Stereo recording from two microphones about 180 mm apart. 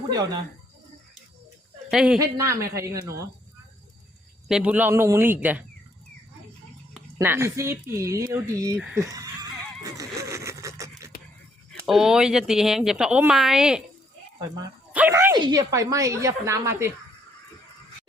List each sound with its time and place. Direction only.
1.9 s a woman's voice: 5° right (ahead or behind)
2.1 s speech: 15° right (ahead or behind)
4.4 s speech: 5° right (ahead or behind)
7.2 s speech: 15° right (ahead or behind)
9.0 s neigh: 20° right (ahead or behind)
11.7 s speech: centre (ahead or behind)
14.3 s speech: 20° right (ahead or behind)
14.9 s speech: 10° right (ahead or behind)